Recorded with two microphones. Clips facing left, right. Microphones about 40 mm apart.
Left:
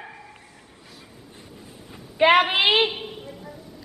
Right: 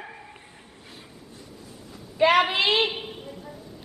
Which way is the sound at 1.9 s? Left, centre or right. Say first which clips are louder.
Left 3 dB; left.